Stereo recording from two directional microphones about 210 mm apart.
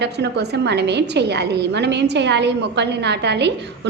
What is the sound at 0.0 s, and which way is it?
A woman's voice, 55° right (ahead or behind).